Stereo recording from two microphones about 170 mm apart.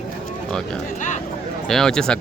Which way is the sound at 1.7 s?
5° left (ahead or behind).